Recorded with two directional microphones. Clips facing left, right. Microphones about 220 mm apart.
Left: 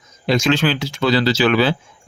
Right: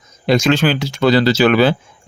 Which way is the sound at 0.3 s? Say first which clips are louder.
Right 3 dB; 45° right (ahead or behind).